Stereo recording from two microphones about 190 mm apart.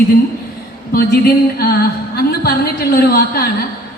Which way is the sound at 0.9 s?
55° left (ahead or behind).